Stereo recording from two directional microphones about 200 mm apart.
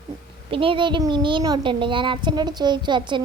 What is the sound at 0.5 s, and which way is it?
A woman's voice, 25° right (ahead or behind).